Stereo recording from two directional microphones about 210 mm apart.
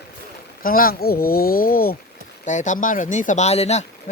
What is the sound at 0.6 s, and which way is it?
Speech, 45° left (ahead or behind).